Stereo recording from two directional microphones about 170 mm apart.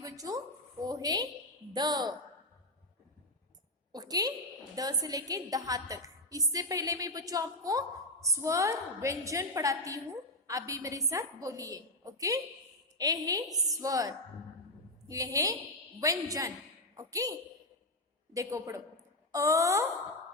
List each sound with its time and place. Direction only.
0.0 s a woman's voice: 20° right (ahead or behind)
3.9 s a woman's voice: 20° right (ahead or behind)
13.5 s a woman's voice: centre (ahead or behind)
13.8 s a woman's voice: 20° right (ahead or behind)
18.3 s a woman's voice: 20° right (ahead or behind)